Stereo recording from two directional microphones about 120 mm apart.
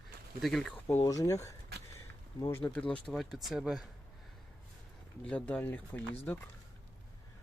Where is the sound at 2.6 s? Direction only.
10° left (ahead or behind).